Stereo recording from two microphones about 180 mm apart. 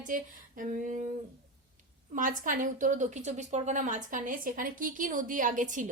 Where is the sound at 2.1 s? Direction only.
45° right (ahead or behind).